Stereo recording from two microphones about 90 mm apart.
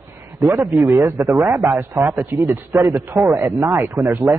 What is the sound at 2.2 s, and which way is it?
A man's voice, 35° right (ahead or behind).